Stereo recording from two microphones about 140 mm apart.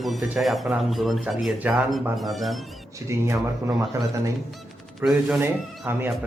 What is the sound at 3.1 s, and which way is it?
Speech, 20° right (ahead or behind).